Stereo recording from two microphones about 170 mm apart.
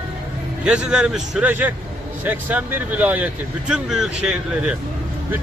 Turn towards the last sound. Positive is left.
turn(degrees=-5)  # may be behind; listen again after turning